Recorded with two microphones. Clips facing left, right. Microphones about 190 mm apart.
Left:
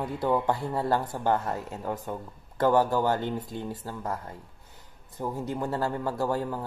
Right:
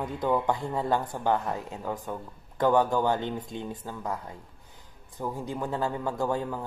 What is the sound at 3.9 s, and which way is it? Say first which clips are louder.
Speech: even; centre (ahead or behind).